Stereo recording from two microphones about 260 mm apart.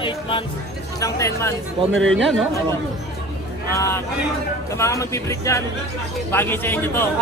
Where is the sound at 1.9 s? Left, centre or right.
Right.